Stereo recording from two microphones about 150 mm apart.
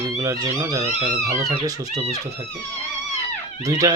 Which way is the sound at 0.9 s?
50° right (ahead or behind).